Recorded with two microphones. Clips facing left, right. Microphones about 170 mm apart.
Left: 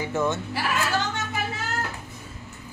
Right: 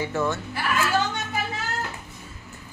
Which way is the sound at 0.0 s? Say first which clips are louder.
Even; 20° left (ahead or behind).